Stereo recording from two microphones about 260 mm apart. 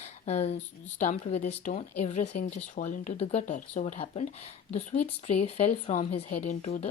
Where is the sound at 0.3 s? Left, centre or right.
Left.